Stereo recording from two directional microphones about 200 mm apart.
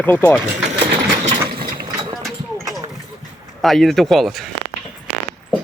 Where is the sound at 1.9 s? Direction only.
20° right (ahead or behind).